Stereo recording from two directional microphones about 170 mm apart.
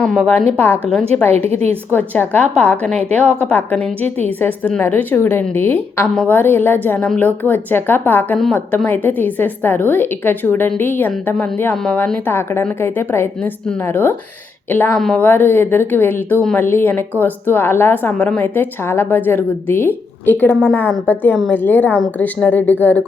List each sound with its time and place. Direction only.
0.0 s a woman's voice: 5° left (ahead or behind)
1.5 s a woman's voice: 40° right (ahead or behind)
1.9 s a woman's voice: 10° left (ahead or behind)